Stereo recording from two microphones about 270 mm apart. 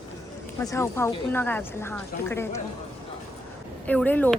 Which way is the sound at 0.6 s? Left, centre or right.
Centre.